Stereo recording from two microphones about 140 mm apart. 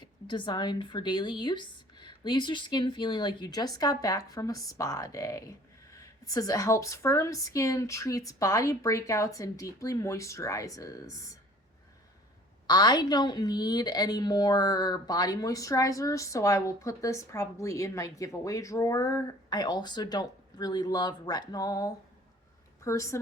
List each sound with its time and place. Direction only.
0.0 s a woman's voice: 35° left (ahead or behind)
12.6 s a woman's voice: 30° left (ahead or behind)